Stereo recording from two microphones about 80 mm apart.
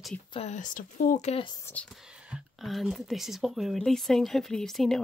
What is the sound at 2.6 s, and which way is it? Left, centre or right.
Speech, centre.